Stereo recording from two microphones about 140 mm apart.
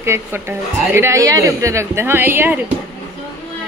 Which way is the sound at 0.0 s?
20° right (ahead or behind).